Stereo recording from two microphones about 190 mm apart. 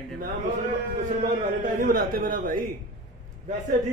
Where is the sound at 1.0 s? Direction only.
45° right (ahead or behind).